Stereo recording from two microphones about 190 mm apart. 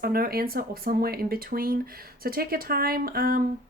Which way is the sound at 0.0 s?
50° right (ahead or behind).